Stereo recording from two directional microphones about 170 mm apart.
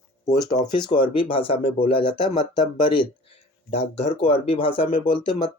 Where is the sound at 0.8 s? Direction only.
30° left (ahead or behind).